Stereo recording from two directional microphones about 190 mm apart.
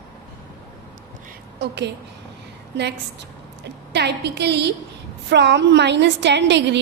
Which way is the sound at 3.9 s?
60° right (ahead or behind).